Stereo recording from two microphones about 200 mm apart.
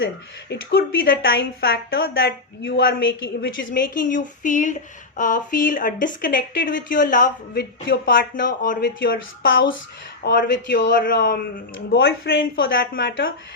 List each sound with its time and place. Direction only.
0.5 s speech: 50° left (ahead or behind); by 3.8 s 65° left (ahead or behind)
4.0 s speech: 40° left (ahead or behind)
8.8 s speech: 60° left (ahead or behind)
10.2 s speech: 55° left (ahead or behind)
10.9 s speech: 45° left (ahead or behind); by 12.6 s 60° left (ahead or behind)
12.7 s speech: 45° left (ahead or behind)